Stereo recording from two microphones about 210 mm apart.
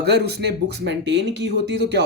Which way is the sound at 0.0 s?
50° right (ahead or behind).